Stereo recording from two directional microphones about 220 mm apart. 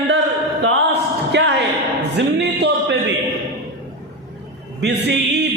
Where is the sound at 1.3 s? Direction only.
55° right (ahead or behind).